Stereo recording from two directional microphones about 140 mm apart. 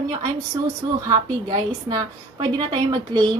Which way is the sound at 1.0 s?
25° right (ahead or behind).